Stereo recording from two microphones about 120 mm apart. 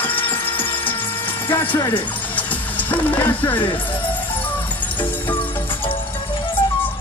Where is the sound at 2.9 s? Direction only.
15° left (ahead or behind).